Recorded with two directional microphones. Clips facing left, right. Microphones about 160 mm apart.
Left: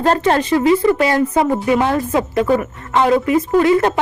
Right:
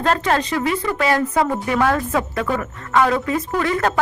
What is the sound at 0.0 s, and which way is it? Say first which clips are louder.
Speech: left 4 dB; 30° left (ahead or behind).